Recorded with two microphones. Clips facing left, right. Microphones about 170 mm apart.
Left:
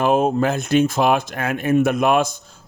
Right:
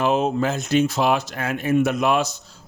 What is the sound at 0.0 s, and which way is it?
Speech, 50° left (ahead or behind).